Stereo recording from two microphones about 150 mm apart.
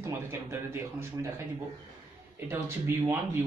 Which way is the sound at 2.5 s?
15° right (ahead or behind).